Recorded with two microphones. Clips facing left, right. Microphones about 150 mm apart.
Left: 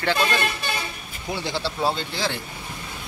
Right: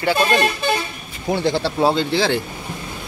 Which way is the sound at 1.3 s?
55° right (ahead or behind).